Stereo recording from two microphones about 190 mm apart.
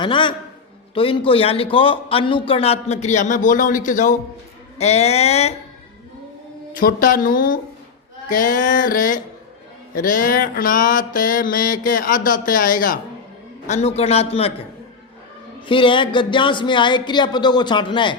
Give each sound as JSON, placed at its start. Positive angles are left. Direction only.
{"t": 0.0, "sound": "a man's voice", "side_deg": 25}
{"t": 6.7, "sound": "mantra", "side_deg": 50}
{"t": 13.7, "sound": "a man's voice", "side_deg": 35}
{"t": 15.6, "sound": "a man's voice", "side_deg": 25}